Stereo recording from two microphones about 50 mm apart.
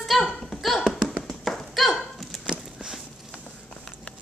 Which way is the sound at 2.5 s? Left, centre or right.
Centre.